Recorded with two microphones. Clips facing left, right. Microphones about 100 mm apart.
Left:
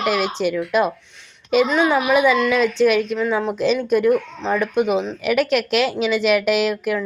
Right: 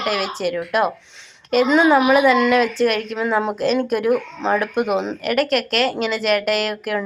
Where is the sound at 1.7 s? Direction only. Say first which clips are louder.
Right 4 dB; 15° right (ahead or behind).